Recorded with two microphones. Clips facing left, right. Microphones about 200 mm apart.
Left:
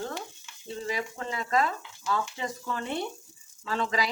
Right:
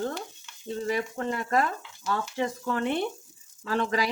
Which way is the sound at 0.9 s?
50° right (ahead or behind).